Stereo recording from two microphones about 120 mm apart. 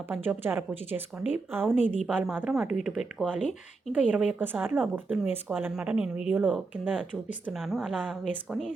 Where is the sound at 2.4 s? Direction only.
5° right (ahead or behind).